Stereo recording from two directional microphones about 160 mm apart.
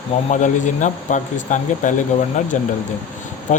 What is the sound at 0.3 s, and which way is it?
Speech, 50° left (ahead or behind).